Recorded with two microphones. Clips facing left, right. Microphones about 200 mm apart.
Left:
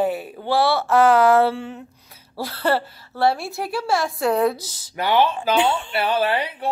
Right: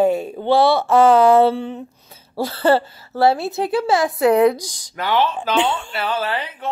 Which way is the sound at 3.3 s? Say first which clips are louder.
Right 5 dB; 20° right (ahead or behind).